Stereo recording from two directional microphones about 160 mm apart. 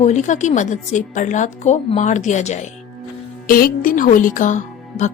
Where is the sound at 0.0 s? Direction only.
45° left (ahead or behind).